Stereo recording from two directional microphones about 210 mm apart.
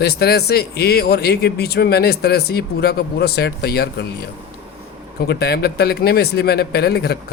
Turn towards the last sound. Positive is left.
turn(degrees=50)  # may be behind; listen again after turning